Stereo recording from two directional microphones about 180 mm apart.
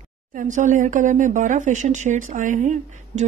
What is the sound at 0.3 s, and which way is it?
Speech, 45° right (ahead or behind).